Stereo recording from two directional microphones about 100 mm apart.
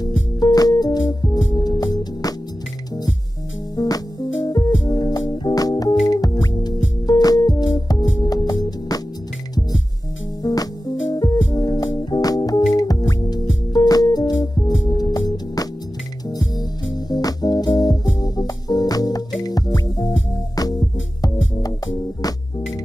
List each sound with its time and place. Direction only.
0.0 s music: 40° left (ahead or behind)
3.7 s music: 40° left (ahead or behind)
10.4 s music: 40° left (ahead or behind)